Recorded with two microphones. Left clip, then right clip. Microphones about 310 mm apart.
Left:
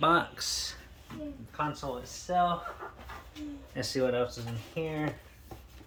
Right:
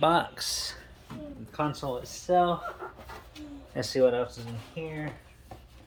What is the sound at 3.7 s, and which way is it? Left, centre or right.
Speech, centre.